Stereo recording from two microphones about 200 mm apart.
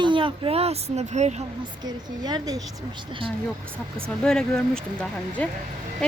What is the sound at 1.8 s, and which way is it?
Speech, 20° right (ahead or behind).